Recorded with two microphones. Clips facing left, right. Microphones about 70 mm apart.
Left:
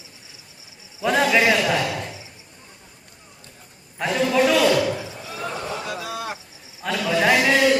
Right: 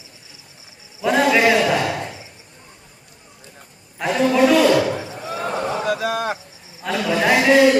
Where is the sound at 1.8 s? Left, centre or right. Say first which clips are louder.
Right 3 dB; right.